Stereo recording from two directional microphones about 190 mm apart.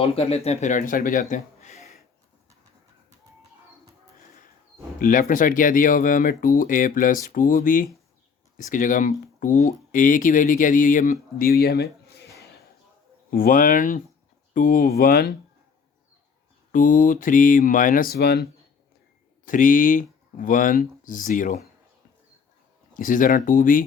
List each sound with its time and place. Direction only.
0.0 s speech: 30° left (ahead or behind)
4.9 s speech: 45° left (ahead or behind)
13.3 s speech: 45° left (ahead or behind)
16.7 s speech: 45° left (ahead or behind)
19.5 s speech: 45° left (ahead or behind)
23.0 s speech: 45° left (ahead or behind)